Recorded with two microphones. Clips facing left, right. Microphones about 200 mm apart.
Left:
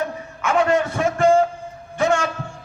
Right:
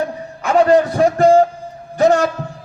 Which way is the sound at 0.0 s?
35° right (ahead or behind).